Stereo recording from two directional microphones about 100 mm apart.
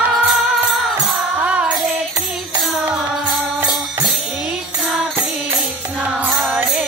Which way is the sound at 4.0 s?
15° right (ahead or behind).